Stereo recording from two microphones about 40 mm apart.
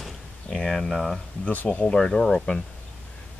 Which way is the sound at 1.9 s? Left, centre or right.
Centre.